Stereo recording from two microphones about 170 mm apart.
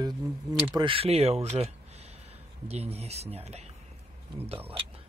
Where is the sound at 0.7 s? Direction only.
30° right (ahead or behind).